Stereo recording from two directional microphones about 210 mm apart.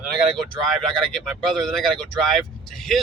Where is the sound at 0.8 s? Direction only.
Centre (ahead or behind).